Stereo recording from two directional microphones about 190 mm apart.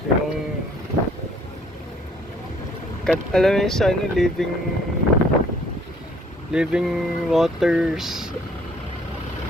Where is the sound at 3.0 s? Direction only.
5° left (ahead or behind).